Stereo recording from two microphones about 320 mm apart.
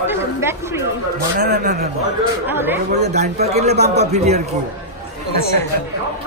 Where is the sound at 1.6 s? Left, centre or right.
Right.